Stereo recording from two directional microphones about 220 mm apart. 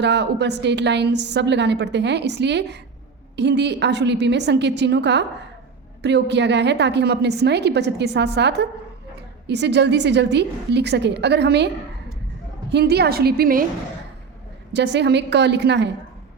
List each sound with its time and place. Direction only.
0.0 s a woman's voice: 50° right (ahead or behind)
12.7 s a woman's voice: 45° right (ahead or behind)
14.7 s a woman's voice: 50° right (ahead or behind)